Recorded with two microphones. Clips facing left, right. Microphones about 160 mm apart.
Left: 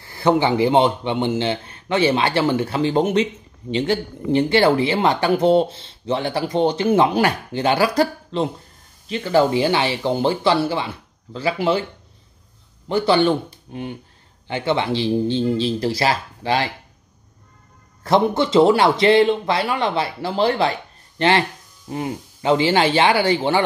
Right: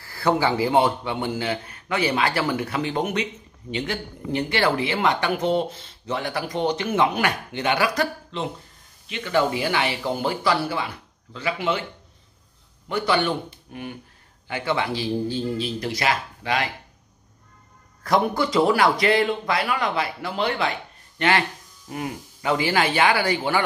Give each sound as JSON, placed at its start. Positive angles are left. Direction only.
{"t": 0.0, "sound": "speech", "side_deg": 20}
{"t": 12.8, "sound": "speech", "side_deg": 30}
{"t": 18.0, "sound": "speech", "side_deg": 25}